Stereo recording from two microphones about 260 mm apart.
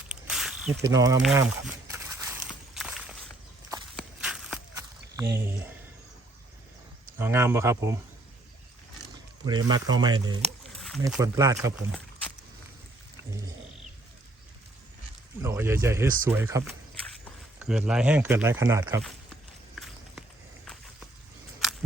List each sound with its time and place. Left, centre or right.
0.1 s snake: centre
0.8 s speech: centre
1.3 s walk: centre
4.7 s a sound: centre
7.2 s speech: centre
9.5 s speech: centre
10.8 s a sound: centre
11.0 s speech: centre
15.4 s speech: centre
19.7 s run: centre